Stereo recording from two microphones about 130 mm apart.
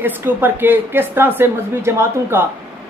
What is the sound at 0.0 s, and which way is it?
Speech, 15° right (ahead or behind).